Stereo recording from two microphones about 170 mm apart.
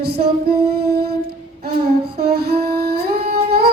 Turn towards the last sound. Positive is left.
turn(degrees=-70)  # may be behind; listen again after turning